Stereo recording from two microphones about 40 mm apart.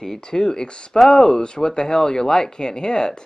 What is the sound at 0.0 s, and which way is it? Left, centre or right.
Speech, centre.